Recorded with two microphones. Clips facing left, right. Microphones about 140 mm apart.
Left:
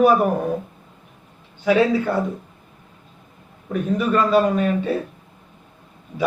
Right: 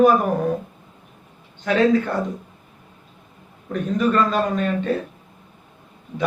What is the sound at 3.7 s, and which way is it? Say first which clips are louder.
A man's voice: even; 5° left (ahead or behind).